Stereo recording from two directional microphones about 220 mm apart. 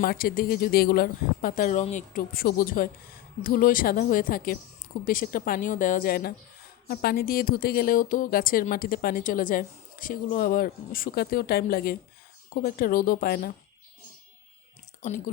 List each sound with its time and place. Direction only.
0.0 s a woman's voice: 40° left (ahead or behind)